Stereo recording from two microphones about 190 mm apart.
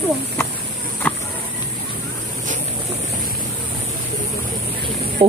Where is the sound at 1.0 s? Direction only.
10° left (ahead or behind).